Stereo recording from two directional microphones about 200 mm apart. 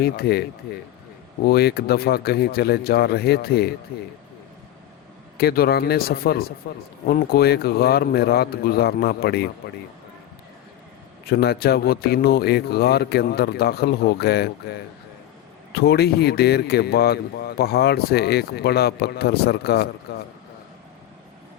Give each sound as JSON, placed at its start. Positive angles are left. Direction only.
{"t": 0.0, "sound": "a man's voice", "side_deg": 50}
{"t": 1.5, "sound": "a man's voice", "side_deg": 50}
{"t": 5.4, "sound": "a man's voice", "side_deg": 50}
{"t": 11.3, "sound": "a man's voice", "side_deg": 50}